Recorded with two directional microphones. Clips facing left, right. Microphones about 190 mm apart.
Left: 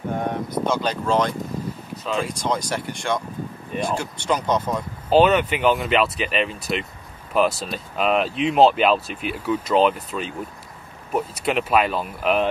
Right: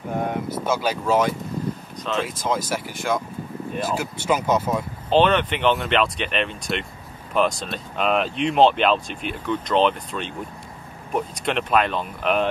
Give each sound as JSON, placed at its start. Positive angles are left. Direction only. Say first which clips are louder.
{"t": 0.1, "sound": "speech", "louder": "right 1 dB", "side_deg": -5}
{"t": 5.1, "sound": "speech", "louder": "left 2 dB", "side_deg": 5}